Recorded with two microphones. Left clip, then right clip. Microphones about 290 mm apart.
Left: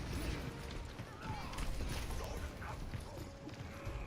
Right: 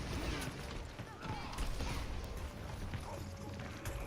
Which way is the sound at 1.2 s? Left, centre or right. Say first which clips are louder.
Right 1 dB; centre.